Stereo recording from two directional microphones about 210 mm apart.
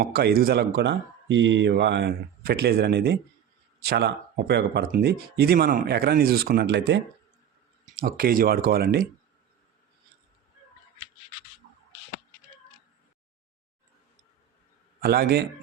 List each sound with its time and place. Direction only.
0.0 s speech: 45° right (ahead or behind)
7.9 s speech: 40° right (ahead or behind)
15.0 s speech: 45° right (ahead or behind)